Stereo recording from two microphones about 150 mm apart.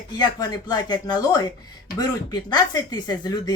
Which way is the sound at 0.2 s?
25° left (ahead or behind).